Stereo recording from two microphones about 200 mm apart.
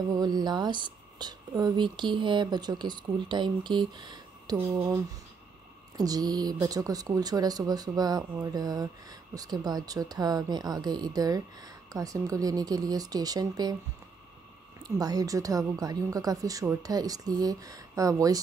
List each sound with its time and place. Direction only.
0.1 s speech: 20° right (ahead or behind)
14.8 s a woman's voice: 20° right (ahead or behind)